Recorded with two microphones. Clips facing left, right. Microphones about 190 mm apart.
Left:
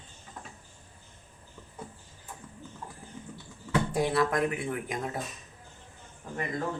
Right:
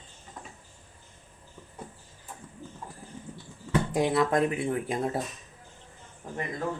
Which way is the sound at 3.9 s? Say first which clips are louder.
Right 3 dB; 20° right (ahead or behind).